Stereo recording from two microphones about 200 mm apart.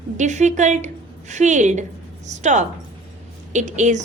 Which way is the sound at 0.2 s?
35° right (ahead or behind).